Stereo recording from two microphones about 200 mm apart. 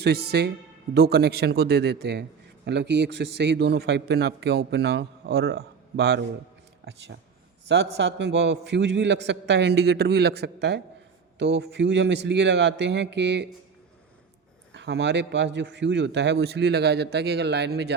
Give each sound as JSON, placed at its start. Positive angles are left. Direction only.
{"t": 0.0, "sound": "a man's voice", "side_deg": -55}
{"t": 7.7, "sound": "a man's voice", "side_deg": -60}
{"t": 14.7, "sound": "a man's voice", "side_deg": -60}